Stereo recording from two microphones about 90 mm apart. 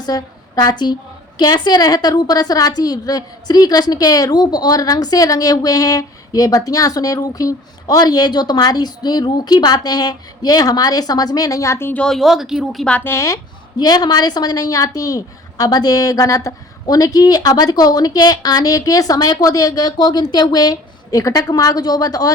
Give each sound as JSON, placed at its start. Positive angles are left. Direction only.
{"t": 0.0, "sound": "a woman's voice", "side_deg": 45}
{"t": 11.9, "sound": "speech", "side_deg": 5}
{"t": 13.1, "sound": "speech", "side_deg": 35}
{"t": 13.7, "sound": "a woman's voice", "side_deg": 50}